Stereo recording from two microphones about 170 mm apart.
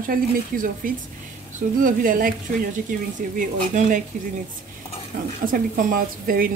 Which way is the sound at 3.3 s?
45° right (ahead or behind).